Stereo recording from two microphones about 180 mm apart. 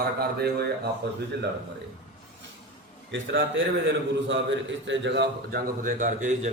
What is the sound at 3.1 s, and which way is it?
A man's voice, 90° right.